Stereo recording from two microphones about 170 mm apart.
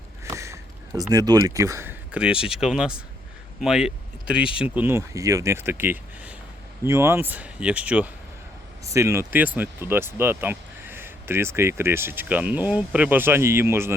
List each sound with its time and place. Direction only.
0.3 s speech: 15° right (ahead or behind)